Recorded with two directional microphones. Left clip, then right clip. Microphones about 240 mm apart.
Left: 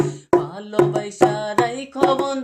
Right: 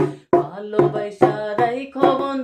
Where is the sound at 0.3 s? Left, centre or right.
Left.